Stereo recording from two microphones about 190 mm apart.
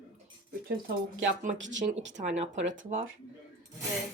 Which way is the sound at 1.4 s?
45° right (ahead or behind).